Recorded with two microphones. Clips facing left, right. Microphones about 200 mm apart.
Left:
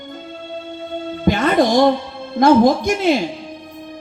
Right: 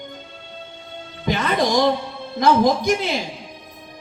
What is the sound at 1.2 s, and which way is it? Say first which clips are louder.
Music: left 5 dB; 50° left (ahead or behind).